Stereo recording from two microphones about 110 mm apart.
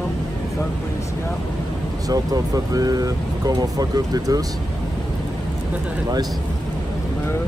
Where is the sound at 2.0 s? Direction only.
35° right (ahead or behind).